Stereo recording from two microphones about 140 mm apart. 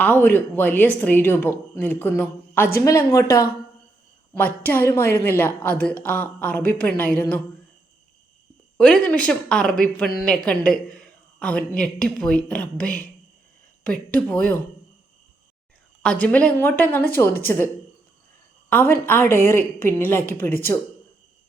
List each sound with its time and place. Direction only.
0.0 s speech: 15° left (ahead or behind)
4.4 s speech: 15° left (ahead or behind)
8.8 s speech: 5° left (ahead or behind)
16.0 s speech: 10° left (ahead or behind)
18.7 s speech: 15° left (ahead or behind)